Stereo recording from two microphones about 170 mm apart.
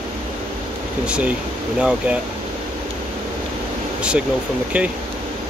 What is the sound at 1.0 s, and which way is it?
Speech, 5° right (ahead or behind).